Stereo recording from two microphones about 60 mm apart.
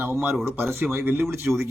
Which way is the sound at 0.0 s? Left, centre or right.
Right.